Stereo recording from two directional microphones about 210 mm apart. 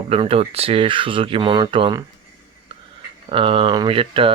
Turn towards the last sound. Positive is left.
turn(degrees=-25)  # may be behind; listen again after turning